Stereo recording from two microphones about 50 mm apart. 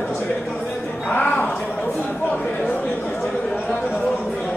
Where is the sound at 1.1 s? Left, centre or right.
Left.